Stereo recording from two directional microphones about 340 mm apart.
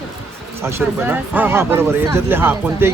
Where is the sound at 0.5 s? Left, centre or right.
Centre.